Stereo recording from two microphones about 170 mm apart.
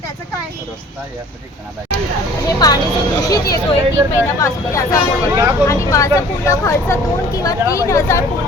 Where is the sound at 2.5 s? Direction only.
20° left (ahead or behind).